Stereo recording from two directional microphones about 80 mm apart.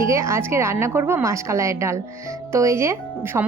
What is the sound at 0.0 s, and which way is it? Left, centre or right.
Speech, right.